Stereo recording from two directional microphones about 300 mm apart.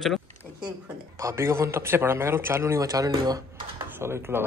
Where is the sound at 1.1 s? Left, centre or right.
Centre.